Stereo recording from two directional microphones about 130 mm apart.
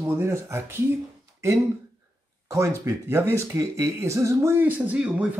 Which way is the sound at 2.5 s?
20° right (ahead or behind).